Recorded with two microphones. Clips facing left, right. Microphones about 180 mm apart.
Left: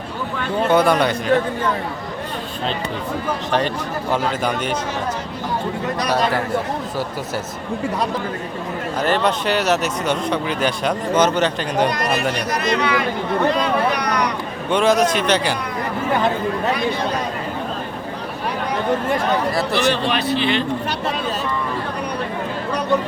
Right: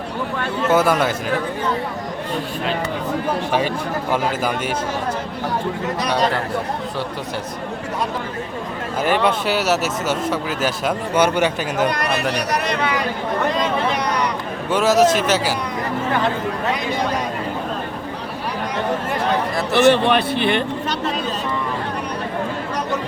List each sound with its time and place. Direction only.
0.7 s speech: 5° right (ahead or behind)
4.1 s speech: 5° right (ahead or behind)
9.0 s speech: 10° right (ahead or behind)
12.3 s a man's voice: 65° right (ahead or behind)
13.9 s a sound: 25° right (ahead or behind)
14.7 s speech: 5° right (ahead or behind)
19.7 s a man's voice: 60° right (ahead or behind)